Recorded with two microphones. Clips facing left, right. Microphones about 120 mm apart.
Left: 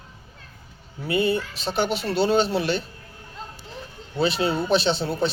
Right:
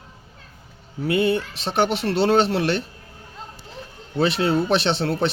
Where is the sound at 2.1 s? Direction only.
85° right.